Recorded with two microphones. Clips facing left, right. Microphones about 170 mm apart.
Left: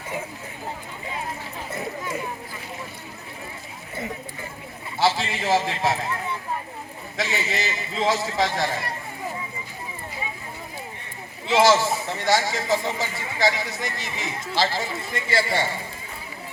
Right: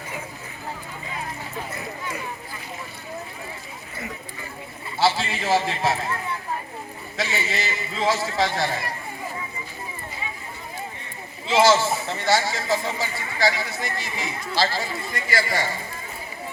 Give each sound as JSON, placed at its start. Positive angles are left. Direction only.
{"t": 4.9, "sound": "a man's voice", "side_deg": 15}
{"t": 7.2, "sound": "speech", "side_deg": 20}
{"t": 11.6, "sound": "speech", "side_deg": 15}